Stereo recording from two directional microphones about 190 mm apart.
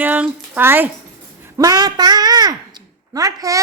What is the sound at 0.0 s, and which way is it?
A child's voice, 10° right (ahead or behind).